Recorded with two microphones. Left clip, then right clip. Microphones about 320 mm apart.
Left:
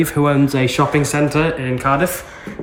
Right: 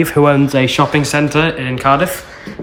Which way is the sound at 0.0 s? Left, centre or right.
Right.